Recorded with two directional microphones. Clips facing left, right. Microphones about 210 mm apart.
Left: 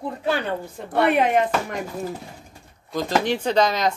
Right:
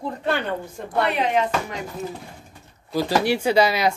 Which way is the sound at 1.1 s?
50° left (ahead or behind).